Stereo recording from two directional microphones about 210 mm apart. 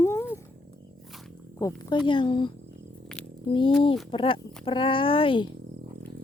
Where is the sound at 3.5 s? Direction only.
25° left (ahead or behind).